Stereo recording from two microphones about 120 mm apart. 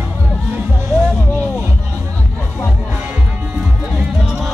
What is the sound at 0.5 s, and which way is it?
Music, 10° right (ahead or behind).